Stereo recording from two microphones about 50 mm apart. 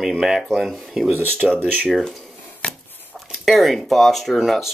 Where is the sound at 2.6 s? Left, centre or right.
Left.